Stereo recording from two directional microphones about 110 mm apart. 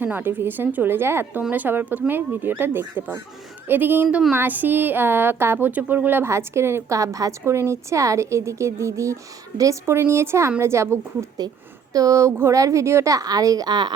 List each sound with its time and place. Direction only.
0.0 s a woman's voice: 15° right (ahead or behind); by 13.9 s 40° right (ahead or behind)